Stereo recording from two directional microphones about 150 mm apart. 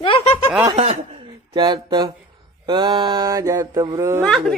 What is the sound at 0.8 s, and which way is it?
Speech, 40° right (ahead or behind).